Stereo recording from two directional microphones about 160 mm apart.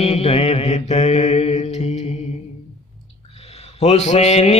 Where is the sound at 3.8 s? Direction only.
45° left (ahead or behind).